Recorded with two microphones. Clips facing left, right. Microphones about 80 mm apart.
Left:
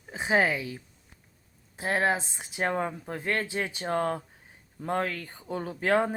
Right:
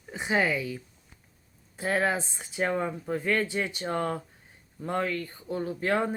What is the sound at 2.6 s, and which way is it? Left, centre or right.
Speech, left.